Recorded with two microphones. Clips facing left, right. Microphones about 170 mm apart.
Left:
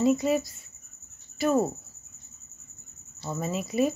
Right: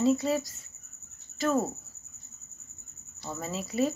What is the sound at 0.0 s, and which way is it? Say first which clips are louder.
Speech: left 2 dB; 15° left (ahead or behind).